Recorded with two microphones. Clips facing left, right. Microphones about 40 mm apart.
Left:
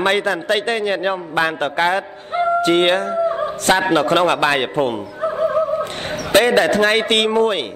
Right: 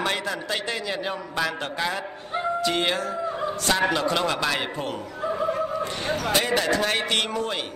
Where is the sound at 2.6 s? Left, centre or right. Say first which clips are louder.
Left 9 dB; left.